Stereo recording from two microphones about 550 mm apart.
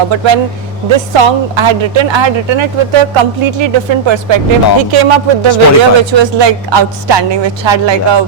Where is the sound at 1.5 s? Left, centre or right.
Right.